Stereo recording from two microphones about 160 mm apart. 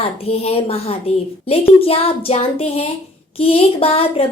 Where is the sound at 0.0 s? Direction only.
40° left (ahead or behind).